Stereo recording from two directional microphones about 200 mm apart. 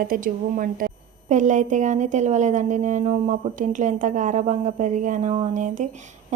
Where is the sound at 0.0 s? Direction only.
45° right (ahead or behind).